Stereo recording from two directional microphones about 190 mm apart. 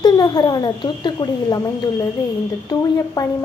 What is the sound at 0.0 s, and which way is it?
A woman's voice, 20° left (ahead or behind).